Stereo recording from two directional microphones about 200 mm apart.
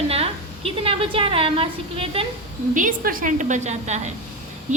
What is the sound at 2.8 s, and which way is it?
A woman's voice, 45° right (ahead or behind).